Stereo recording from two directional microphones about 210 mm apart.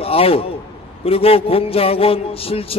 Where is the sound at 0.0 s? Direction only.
25° left (ahead or behind).